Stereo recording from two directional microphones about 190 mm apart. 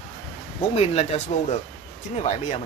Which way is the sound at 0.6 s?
35° left (ahead or behind).